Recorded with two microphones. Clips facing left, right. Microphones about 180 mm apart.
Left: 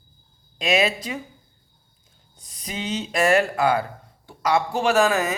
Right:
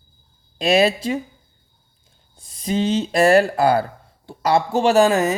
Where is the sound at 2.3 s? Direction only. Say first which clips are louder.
Right 11 dB; 30° right (ahead or behind).